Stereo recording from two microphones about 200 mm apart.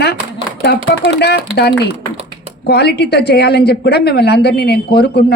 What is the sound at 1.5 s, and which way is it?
A woman's voice, 55° left (ahead or behind).